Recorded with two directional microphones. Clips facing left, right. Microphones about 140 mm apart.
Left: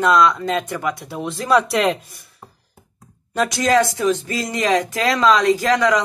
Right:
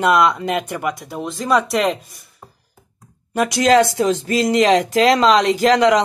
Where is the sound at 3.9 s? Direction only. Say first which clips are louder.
Right 1 dB; 35° right (ahead or behind).